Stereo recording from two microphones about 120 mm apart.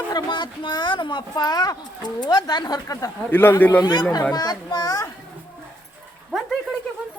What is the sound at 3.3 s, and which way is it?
Speech, 15° left (ahead or behind).